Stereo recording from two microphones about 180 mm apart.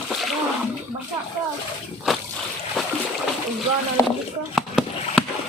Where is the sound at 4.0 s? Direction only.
15° left (ahead or behind).